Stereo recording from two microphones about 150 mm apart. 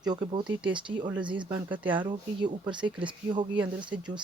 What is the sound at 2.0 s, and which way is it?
Speech, 30° right (ahead or behind).